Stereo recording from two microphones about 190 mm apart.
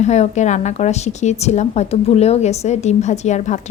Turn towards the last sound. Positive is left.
turn(degrees=40)  # may be behind; listen again after turning